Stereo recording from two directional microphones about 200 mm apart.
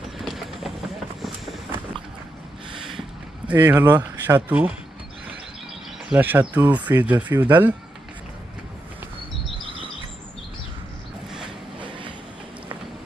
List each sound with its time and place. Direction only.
0.2 s vehicle: centre (ahead or behind)
3.4 s speech: 10° right (ahead or behind)
6.1 s speech: 10° right (ahead or behind)
11.8 s train: 25° right (ahead or behind)